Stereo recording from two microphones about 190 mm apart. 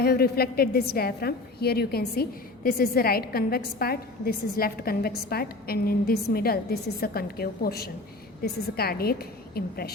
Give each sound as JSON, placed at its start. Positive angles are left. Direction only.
{"t": 0.0, "sound": "a woman's voice", "side_deg": 55}